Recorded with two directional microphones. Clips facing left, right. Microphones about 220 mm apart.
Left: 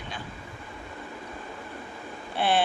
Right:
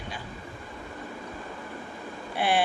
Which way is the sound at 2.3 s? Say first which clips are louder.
Left 1 dB; 10° right (ahead or behind).